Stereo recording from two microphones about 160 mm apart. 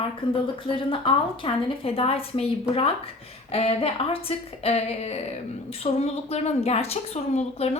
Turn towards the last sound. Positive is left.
turn(degrees=40)  # may be behind; listen again after turning